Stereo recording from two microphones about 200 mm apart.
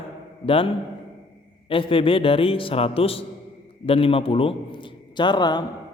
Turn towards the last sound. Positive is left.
turn(degrees=20)  # may be behind; listen again after turning